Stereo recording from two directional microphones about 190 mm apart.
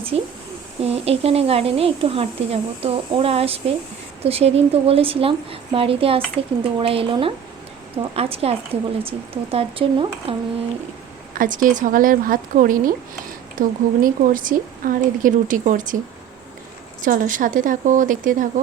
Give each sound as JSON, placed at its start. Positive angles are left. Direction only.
{"t": 0.1, "sound": "speech", "side_deg": -30}
{"t": 11.3, "sound": "speech", "side_deg": -45}
{"t": 17.0, "sound": "speech", "side_deg": -45}